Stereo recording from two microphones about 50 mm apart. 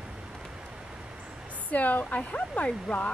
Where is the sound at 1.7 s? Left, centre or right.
Left.